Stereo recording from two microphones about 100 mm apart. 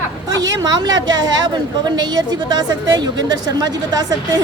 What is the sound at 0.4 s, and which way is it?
A woman's voice, 40° right (ahead or behind).